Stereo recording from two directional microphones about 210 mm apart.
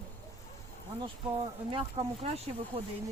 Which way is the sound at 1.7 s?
25° right (ahead or behind).